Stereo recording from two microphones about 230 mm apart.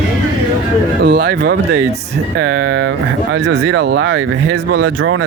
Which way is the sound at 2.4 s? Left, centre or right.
Right.